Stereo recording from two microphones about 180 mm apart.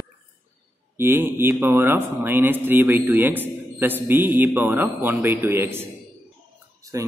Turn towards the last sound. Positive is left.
turn(degrees=-20)  # may be behind; listen again after turning